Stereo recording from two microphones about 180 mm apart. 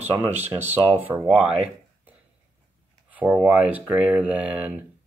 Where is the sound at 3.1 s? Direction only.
10° right (ahead or behind).